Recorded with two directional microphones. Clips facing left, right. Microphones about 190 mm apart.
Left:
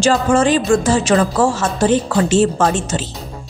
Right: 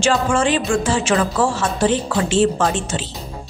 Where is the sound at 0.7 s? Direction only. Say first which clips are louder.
Left 4 dB; 40° left (ahead or behind).